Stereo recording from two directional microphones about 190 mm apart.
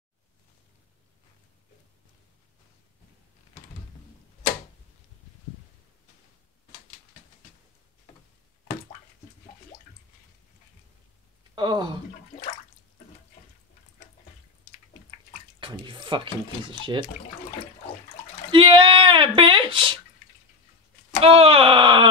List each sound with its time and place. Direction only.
11.5 s speech: 25° right (ahead or behind)
15.6 s drip: 25° right (ahead or behind)
16.6 s speech: 25° right (ahead or behind)
18.5 s speech: 25° right (ahead or behind)
21.2 s speech: 30° right (ahead or behind)